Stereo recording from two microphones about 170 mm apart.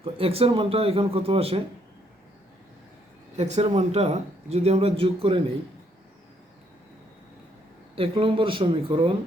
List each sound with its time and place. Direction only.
0.0 s speech: 35° right (ahead or behind)
3.3 s speech: 40° right (ahead or behind)
7.9 s speech: 30° right (ahead or behind)